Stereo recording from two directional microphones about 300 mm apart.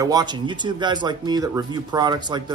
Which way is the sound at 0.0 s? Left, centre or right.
Centre.